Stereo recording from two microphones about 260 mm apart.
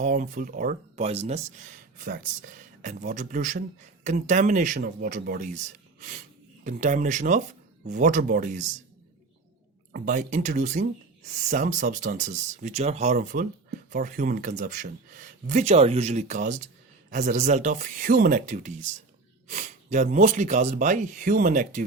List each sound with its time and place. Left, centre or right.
0.0 s speech: right
6.0 s wheeze: right
6.7 s speech: right
9.9 s speech: right